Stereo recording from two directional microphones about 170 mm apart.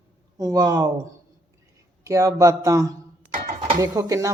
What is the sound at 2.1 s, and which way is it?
Speech, 20° right (ahead or behind).